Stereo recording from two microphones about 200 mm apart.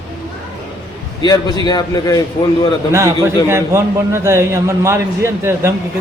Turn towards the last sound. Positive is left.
turn(degrees=-15)  # may be behind; listen again after turning